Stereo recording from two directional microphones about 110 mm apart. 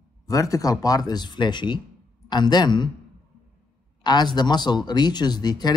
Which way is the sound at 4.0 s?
40° left (ahead or behind).